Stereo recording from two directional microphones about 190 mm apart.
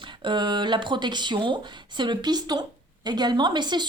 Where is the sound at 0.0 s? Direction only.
25° right (ahead or behind).